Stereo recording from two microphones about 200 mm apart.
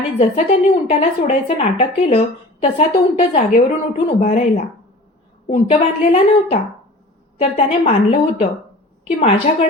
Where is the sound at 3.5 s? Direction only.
40° left (ahead or behind).